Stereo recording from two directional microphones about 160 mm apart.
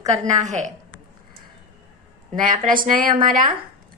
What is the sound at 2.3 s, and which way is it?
A woman's voice, 55° right (ahead or behind).